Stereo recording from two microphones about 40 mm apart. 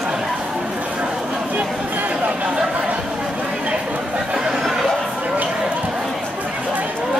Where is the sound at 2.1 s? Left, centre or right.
Right.